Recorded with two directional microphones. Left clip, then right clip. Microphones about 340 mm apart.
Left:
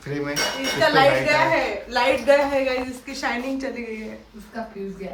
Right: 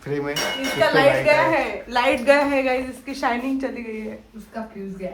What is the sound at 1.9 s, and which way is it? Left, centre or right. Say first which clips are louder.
Speech: right 1 dB; right.